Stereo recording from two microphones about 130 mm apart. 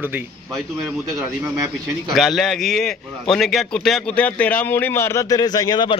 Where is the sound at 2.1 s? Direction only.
Centre (ahead or behind).